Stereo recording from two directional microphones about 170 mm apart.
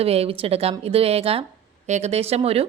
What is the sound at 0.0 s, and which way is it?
A woman's voice, 35° right (ahead or behind).